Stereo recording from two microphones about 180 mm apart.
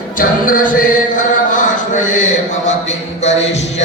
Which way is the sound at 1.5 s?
45° left (ahead or behind).